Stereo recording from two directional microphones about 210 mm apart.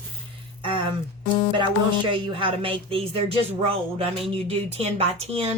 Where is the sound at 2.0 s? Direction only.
25° right (ahead or behind).